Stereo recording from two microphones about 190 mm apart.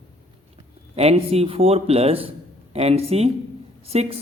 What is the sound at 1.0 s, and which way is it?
A man's voice, 30° right (ahead or behind).